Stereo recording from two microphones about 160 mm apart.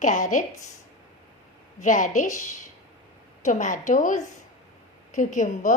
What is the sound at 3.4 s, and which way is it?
A woman's voice, 50° left (ahead or behind).